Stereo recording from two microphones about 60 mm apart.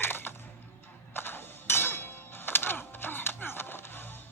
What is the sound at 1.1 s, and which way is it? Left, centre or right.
Music, left.